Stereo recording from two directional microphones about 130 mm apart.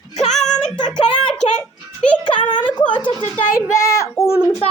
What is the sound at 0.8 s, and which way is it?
Speech, 40° left (ahead or behind).